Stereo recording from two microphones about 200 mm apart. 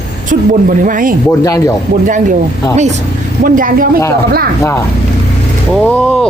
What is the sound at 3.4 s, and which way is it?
Speech, 45° right (ahead or behind).